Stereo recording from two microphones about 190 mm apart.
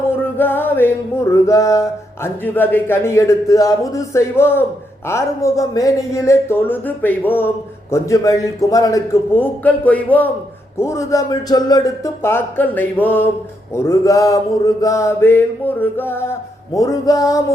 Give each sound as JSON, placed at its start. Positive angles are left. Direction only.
{"t": 0.2, "sound": "speech", "side_deg": 10}